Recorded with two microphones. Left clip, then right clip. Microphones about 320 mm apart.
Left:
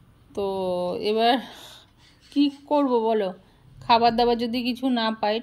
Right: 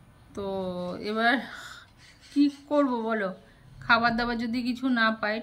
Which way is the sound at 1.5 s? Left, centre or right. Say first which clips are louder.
Right 2 dB; centre.